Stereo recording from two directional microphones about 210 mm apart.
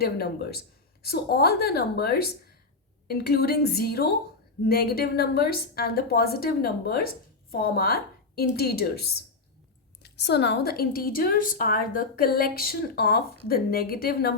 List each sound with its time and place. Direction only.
0.0 s a woman's voice: 50° left (ahead or behind)